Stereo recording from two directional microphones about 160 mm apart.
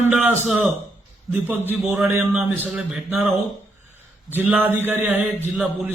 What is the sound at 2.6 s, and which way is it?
Speech, 5° right (ahead or behind).